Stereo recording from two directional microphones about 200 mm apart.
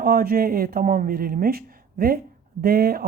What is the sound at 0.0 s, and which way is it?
A woman's voice, 50° right (ahead or behind).